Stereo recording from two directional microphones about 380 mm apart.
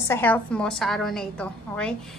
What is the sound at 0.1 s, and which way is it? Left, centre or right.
A woman's voice, centre.